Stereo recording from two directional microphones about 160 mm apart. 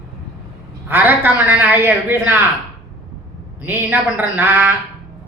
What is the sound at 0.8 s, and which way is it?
Speech, 10° right (ahead or behind).